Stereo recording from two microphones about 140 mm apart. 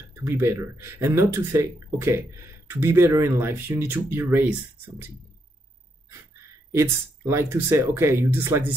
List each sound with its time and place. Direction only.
0.1 s speech: 20° right (ahead or behind)
6.7 s speech: 20° right (ahead or behind)